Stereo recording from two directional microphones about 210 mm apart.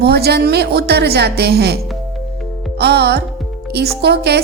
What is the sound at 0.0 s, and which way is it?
Speech, 50° right (ahead or behind).